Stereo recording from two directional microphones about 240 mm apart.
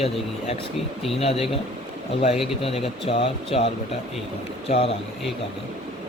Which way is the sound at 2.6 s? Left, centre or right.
Left.